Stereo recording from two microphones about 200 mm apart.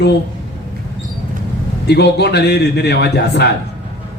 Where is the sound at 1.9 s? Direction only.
55° left (ahead or behind).